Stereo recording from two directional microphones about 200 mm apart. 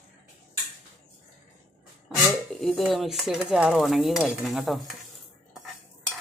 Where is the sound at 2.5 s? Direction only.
Centre (ahead or behind).